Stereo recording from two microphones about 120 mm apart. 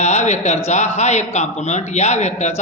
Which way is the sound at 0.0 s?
75° left (ahead or behind).